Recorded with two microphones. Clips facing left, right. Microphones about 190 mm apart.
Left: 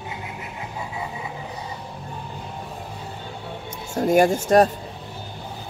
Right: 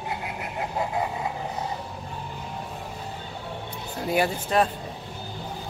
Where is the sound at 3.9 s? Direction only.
45° left (ahead or behind).